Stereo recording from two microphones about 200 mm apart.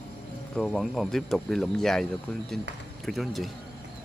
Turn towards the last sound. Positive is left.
turn(degrees=0)  # may be behind; listen again after turning